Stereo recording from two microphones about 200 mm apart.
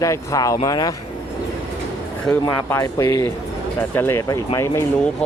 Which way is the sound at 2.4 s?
15° left (ahead or behind).